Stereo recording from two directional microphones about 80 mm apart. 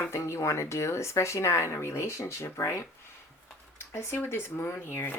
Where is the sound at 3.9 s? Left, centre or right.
Left.